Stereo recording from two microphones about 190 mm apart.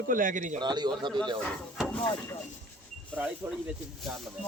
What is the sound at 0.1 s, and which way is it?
Speech, 45° right (ahead or behind).